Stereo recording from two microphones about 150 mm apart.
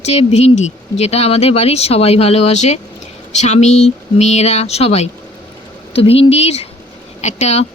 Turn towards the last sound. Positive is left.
turn(degrees=45)  # may be behind; listen again after turning